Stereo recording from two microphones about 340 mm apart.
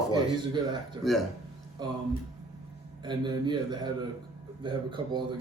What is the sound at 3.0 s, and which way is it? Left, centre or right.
A man's voice, centre.